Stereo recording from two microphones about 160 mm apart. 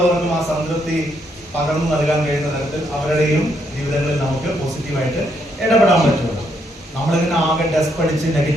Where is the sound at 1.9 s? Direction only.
Centre (ahead or behind).